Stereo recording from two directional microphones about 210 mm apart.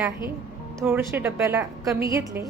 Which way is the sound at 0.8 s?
10° right (ahead or behind).